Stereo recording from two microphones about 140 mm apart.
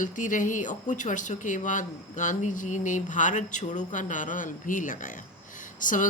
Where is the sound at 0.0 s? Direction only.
65° left (ahead or behind).